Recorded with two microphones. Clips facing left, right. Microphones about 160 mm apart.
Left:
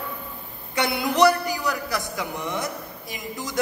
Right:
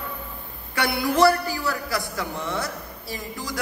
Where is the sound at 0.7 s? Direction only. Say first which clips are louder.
Even; 20° left (ahead or behind).